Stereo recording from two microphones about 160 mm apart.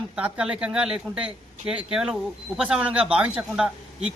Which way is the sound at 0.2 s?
10° right (ahead or behind).